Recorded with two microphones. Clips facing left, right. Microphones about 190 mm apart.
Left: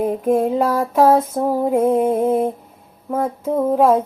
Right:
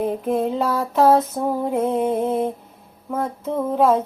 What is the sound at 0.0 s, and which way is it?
Music, 10° left (ahead or behind).